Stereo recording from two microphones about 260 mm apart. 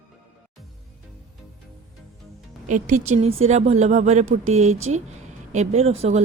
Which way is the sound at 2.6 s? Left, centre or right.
Right.